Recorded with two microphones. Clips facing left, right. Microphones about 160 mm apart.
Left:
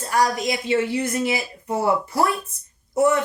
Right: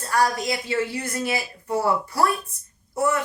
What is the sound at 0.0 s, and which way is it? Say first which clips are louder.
Speech: left 1 dB; 20° left (ahead or behind).